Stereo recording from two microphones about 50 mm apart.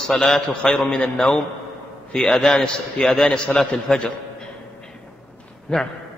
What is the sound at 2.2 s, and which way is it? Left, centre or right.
A man's voice, centre.